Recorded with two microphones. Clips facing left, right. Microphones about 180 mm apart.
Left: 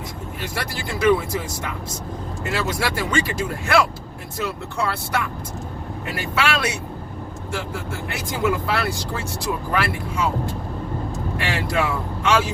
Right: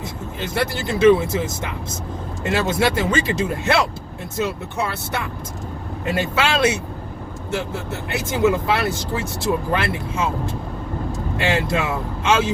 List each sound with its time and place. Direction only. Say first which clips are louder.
0.3 s speech: right 7 dB; 25° right (ahead or behind)
6.1 s speech: right 3 dB; 25° right (ahead or behind)